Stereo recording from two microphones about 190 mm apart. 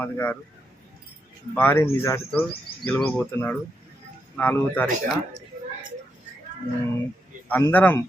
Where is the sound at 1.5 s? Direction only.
10° left (ahead or behind).